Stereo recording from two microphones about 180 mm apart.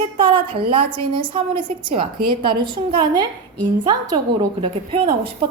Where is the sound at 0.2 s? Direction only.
25° right (ahead or behind).